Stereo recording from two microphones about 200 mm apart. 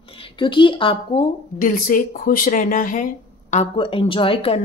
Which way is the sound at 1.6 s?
40° left (ahead or behind).